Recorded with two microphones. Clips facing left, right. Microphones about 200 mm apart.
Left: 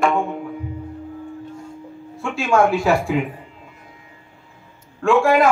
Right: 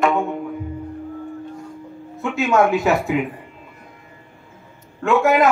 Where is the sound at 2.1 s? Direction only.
20° right (ahead or behind).